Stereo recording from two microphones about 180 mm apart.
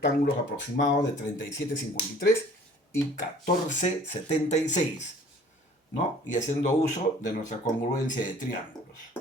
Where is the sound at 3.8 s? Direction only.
40° left (ahead or behind).